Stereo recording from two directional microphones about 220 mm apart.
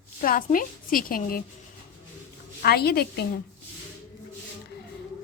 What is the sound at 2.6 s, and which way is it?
Speech, 45° left (ahead or behind).